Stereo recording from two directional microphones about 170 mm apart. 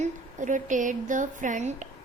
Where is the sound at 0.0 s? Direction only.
45° right (ahead or behind).